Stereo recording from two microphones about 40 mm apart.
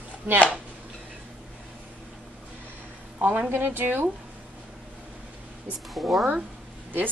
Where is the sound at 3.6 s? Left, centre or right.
Right.